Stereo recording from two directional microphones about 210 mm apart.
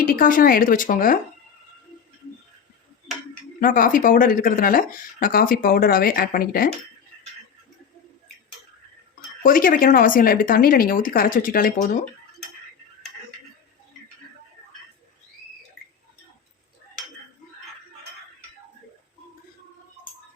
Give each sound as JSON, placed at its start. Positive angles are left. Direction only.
{"t": 0.0, "sound": "speech", "side_deg": 40}
{"t": 3.6, "sound": "speech", "side_deg": 40}
{"t": 9.4, "sound": "speech", "side_deg": 40}